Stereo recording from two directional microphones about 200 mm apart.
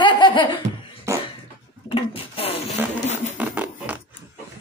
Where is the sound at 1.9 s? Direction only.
25° left (ahead or behind).